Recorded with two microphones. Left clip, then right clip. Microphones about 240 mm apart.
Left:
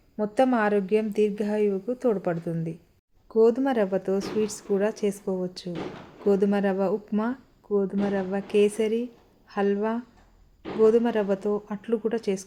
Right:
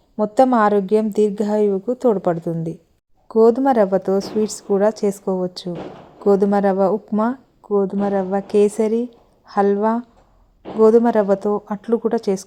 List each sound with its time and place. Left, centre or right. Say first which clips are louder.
0.2 s a woman's voice: right 8 dB; right